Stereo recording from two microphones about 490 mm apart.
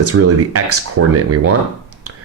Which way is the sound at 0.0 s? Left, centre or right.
Right.